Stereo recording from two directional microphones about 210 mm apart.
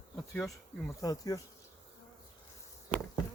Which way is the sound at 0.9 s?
15° left (ahead or behind).